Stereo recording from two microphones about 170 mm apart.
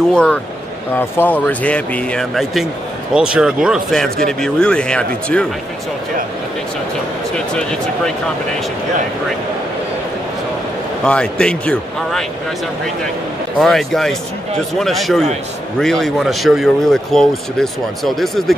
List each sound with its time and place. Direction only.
0.1 s speech: 5° left (ahead or behind)
7.3 s speech: 5° left (ahead or behind)
11.1 s speech: 5° left (ahead or behind)
13.6 s speech: centre (ahead or behind)